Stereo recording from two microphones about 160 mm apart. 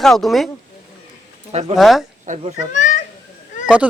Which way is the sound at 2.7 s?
50° left (ahead or behind).